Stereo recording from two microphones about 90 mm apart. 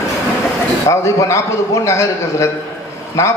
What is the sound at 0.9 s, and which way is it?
A man's voice, 35° left (ahead or behind).